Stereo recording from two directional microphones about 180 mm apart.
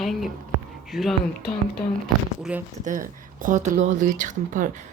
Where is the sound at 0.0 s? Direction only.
Centre (ahead or behind).